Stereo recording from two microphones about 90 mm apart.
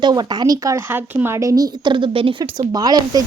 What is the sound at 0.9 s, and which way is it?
Speech, 25° right (ahead or behind).